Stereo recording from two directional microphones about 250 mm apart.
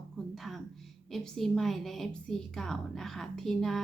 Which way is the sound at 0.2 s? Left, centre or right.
Centre.